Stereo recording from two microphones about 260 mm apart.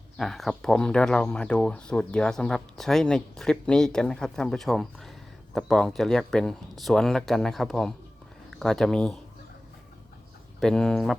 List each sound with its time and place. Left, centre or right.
0.2 s speech: centre
10.6 s speech: centre